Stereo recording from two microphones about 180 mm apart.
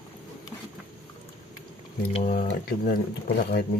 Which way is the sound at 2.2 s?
50° left (ahead or behind).